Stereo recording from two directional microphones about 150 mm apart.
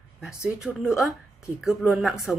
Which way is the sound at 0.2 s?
5° right (ahead or behind).